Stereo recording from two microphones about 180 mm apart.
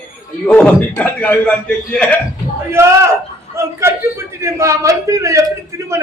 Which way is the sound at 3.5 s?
15° right (ahead or behind).